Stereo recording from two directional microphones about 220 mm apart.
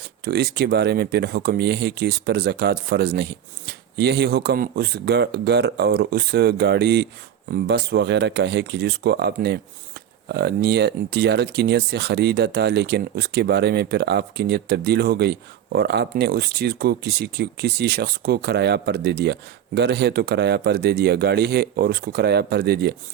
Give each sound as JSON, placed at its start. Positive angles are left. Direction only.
{"t": 0.0, "sound": "speech", "side_deg": -45}